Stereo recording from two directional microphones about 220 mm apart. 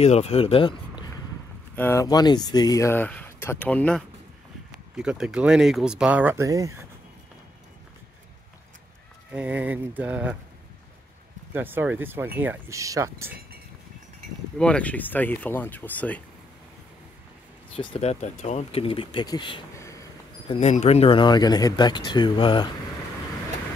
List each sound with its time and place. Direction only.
0.0 s speech: 30° left (ahead or behind)
1.8 s speech: 10° left (ahead or behind); by 6.9 s 15° right (ahead or behind)
9.3 s a sound: 5° right (ahead or behind)
11.5 s a sound: 10° right (ahead or behind)
14.6 s speech: 5° left (ahead or behind)
17.7 s speech: 30° left (ahead or behind)
20.4 s speech: 30° left (ahead or behind)